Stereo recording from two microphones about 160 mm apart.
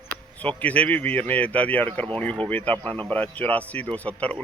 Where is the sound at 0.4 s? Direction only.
10° left (ahead or behind).